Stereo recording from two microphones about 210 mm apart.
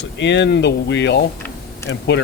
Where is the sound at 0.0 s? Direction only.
55° left (ahead or behind).